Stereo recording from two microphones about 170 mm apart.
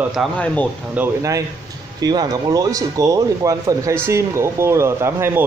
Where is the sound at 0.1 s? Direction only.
5° left (ahead or behind).